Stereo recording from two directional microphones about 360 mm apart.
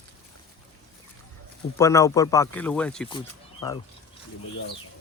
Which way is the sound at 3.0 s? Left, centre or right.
Centre.